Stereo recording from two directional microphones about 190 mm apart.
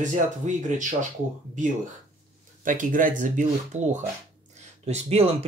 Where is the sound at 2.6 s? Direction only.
45° right (ahead or behind).